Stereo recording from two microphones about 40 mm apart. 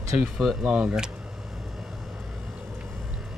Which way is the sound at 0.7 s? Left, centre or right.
Right.